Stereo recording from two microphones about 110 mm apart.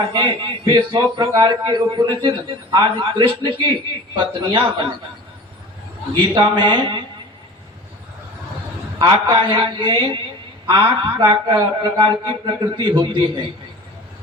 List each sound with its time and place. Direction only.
0.0 s a man's voice: 45° right (ahead or behind)
6.1 s a man's voice: 45° right (ahead or behind)
9.0 s a man's voice: 45° right (ahead or behind)